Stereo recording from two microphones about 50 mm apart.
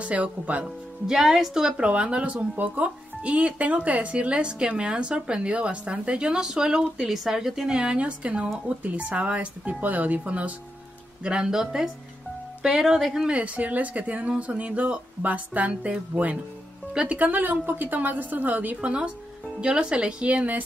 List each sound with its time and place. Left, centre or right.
0.0 s speech: right
1.0 s a woman's voice: centre
7.7 s speech: right
11.2 s a woman's voice: centre
13.3 s speech: right
16.1 s a woman's voice: centre
17.2 s a woman's voice: right